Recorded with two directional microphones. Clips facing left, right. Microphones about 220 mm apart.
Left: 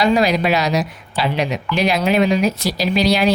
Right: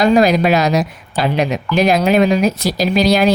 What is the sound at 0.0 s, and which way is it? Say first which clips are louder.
Speech: right 4 dB; 45° right (ahead or behind).